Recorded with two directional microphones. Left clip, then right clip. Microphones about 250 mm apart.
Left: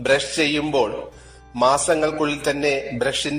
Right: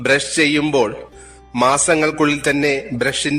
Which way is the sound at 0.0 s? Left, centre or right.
Right.